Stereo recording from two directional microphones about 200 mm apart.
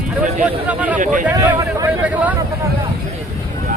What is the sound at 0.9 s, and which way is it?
Speech, 40° right (ahead or behind).